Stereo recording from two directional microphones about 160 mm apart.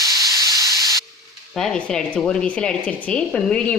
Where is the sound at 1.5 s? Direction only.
5° left (ahead or behind).